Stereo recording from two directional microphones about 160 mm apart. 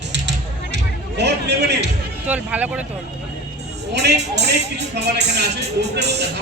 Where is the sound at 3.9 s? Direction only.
90° right.